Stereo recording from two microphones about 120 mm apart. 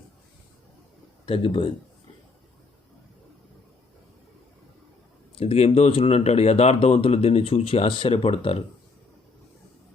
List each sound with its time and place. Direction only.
1.2 s speech: 50° left (ahead or behind)
5.4 s speech: 55° left (ahead or behind)